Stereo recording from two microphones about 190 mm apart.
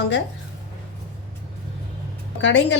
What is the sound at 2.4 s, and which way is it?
Speech, 70° left (ahead or behind).